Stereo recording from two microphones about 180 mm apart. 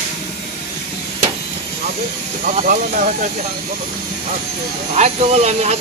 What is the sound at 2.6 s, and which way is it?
Speech, 45° right (ahead or behind).